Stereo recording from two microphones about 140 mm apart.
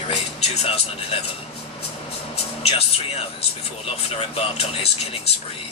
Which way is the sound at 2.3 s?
45° left (ahead or behind).